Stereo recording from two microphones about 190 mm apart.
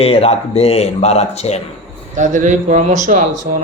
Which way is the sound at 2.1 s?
40° right (ahead or behind).